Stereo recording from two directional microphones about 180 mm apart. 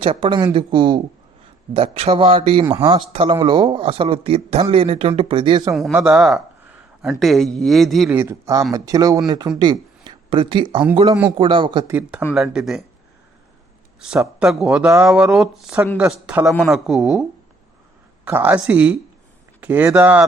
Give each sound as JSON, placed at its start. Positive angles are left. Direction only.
{"t": 0.0, "sound": "speech", "side_deg": -30}
{"t": 2.6, "sound": "speech", "side_deg": -15}
{"t": 2.9, "sound": "speech", "side_deg": -30}
{"t": 6.0, "sound": "speech", "side_deg": -5}
{"t": 8.1, "sound": "speech", "side_deg": -15}
{"t": 11.9, "sound": "speech", "side_deg": -10}
{"t": 14.3, "sound": "speech", "side_deg": -5}
{"t": 18.3, "sound": "speech", "side_deg": -10}